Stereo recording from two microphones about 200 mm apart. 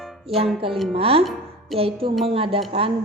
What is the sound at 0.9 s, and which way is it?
A woman's voice, 30° right (ahead or behind).